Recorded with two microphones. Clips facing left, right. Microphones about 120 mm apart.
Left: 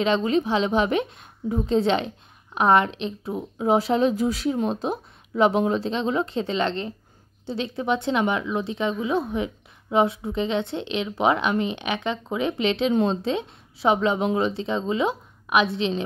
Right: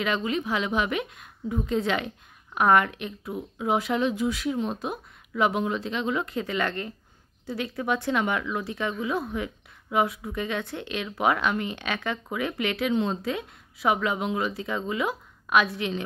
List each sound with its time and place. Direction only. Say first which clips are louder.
0.0 s speech: left 6 dB; 30° left (ahead or behind)